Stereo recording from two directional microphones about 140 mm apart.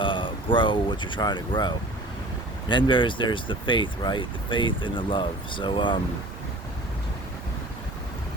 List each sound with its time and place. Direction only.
0.0 s speech: 35° left (ahead or behind)